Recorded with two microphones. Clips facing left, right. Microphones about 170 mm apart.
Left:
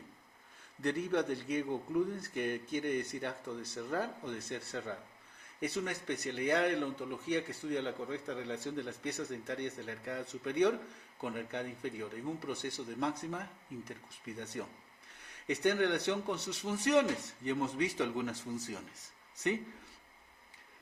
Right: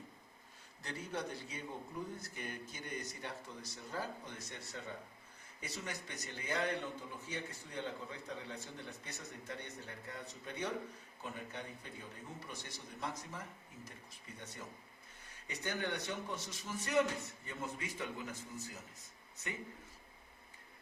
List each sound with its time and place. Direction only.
0.8 s a man's voice: 60° left (ahead or behind); by 18.8 s 90° left